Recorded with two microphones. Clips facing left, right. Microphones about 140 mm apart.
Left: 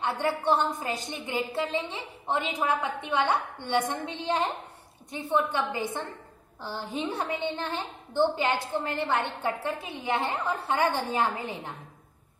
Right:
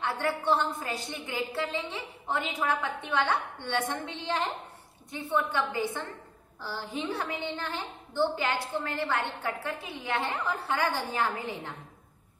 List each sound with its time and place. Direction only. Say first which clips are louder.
0.0 s a woman's voice: left 2 dB; 20° left (ahead or behind)